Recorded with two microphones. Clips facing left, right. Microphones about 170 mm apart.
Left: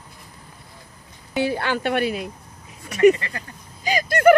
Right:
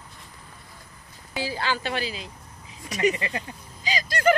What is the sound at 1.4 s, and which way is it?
Speech, 60° left (ahead or behind).